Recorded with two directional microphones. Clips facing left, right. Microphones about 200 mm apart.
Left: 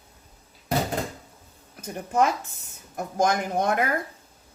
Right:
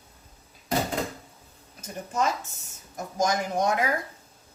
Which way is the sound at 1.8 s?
60° left (ahead or behind).